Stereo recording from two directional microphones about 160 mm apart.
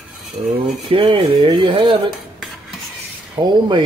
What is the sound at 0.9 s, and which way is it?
Speech, 35° right (ahead or behind).